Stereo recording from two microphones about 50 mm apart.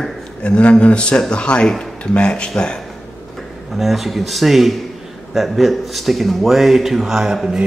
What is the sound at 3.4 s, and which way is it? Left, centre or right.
Speech, centre.